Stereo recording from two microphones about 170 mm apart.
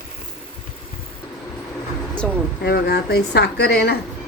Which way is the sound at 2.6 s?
70° left (ahead or behind).